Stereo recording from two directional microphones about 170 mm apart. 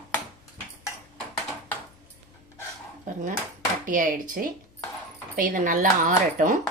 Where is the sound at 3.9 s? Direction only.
50° right (ahead or behind).